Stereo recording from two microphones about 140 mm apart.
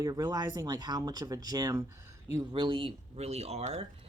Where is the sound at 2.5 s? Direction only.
35° right (ahead or behind).